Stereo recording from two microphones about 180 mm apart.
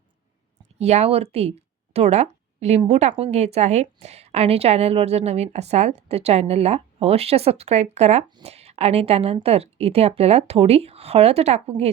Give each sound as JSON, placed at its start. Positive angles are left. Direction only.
{"t": 0.8, "sound": "speech", "side_deg": -35}